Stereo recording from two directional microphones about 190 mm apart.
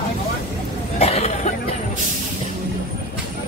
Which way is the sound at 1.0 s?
35° left (ahead or behind).